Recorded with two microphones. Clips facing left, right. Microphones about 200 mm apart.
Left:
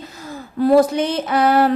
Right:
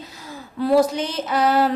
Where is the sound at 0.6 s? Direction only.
50° left (ahead or behind).